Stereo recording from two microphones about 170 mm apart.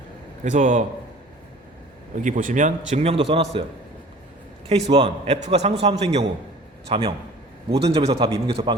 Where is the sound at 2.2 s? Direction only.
50° right (ahead or behind); by 3.6 s 30° right (ahead or behind).